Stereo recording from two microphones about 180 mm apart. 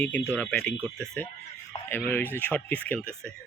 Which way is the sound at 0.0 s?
10° left (ahead or behind).